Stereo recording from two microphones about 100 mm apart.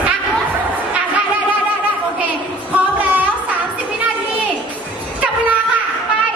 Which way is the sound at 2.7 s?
15° right (ahead or behind).